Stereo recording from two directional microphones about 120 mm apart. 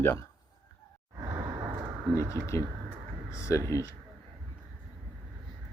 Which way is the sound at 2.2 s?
25° left (ahead or behind).